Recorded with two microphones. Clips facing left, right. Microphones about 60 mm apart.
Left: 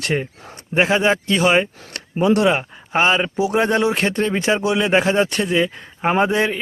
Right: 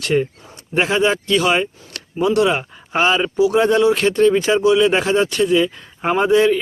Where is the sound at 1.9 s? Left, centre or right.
Left.